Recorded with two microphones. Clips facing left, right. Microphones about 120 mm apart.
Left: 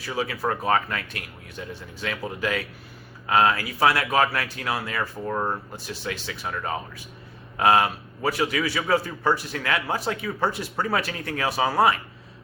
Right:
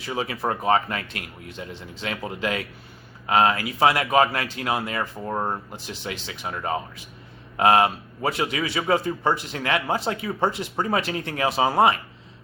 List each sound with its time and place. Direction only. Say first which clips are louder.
0.0 s a man's voice: even; 25° right (ahead or behind)